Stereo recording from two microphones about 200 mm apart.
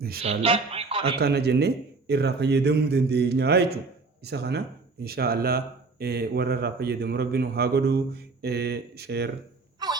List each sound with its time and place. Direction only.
0.2 s speech: 30° right (ahead or behind)
1.2 s a man's voice: 55° right (ahead or behind)
9.8 s wail: 20° right (ahead or behind)